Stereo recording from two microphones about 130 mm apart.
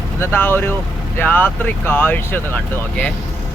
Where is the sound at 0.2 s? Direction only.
15° left (ahead or behind).